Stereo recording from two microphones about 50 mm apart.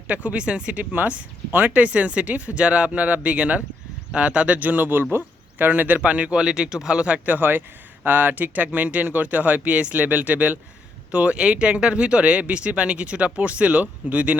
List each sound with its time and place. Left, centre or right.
0.1 s speech: right
7.3 s speech: right